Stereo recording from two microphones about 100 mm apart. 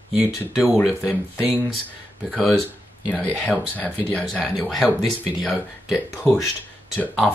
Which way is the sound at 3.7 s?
15° left (ahead or behind).